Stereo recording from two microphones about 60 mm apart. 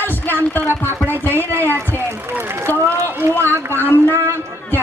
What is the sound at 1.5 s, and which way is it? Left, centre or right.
Speech, right.